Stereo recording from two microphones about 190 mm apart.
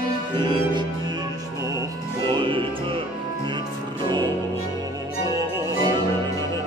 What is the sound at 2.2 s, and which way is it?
Music, 25° right (ahead or behind).